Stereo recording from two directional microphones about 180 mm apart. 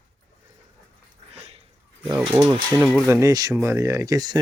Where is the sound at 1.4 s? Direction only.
35° right (ahead or behind).